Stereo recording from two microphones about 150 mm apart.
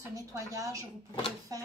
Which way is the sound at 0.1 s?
20° right (ahead or behind).